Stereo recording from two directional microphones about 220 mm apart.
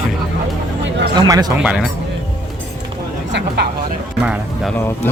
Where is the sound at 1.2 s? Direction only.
15° right (ahead or behind).